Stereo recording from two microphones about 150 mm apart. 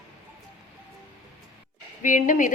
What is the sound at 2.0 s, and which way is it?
Speech, 60° left (ahead or behind).